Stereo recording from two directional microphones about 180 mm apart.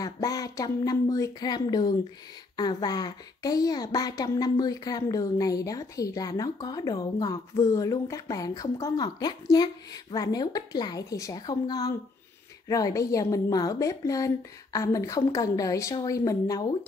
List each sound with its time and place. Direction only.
0.0 s speech: 20° left (ahead or behind)